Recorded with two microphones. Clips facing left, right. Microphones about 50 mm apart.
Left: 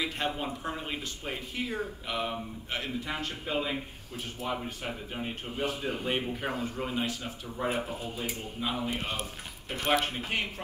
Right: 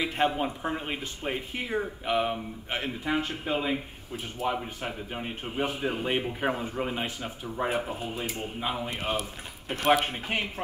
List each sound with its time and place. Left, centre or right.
0.0 s speech: right